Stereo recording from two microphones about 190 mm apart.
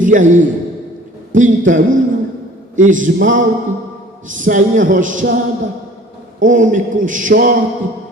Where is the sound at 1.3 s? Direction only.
40° right (ahead or behind).